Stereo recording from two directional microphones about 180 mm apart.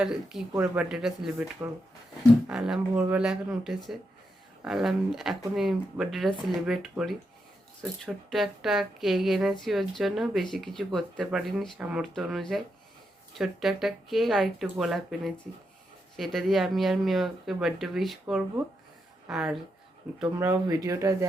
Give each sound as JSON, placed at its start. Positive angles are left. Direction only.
{"t": 0.0, "sound": "speech", "side_deg": -5}
{"t": 2.5, "sound": "speech", "side_deg": -5}
{"t": 20.4, "sound": "speech", "side_deg": -15}